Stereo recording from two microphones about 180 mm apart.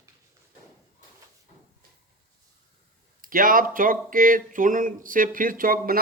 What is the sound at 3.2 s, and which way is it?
Speech, 50° right (ahead or behind).